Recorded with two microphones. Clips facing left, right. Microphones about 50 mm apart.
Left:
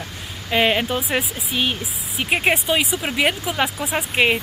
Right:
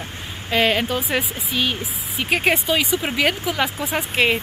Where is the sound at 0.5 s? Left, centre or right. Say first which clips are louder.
Even; centre.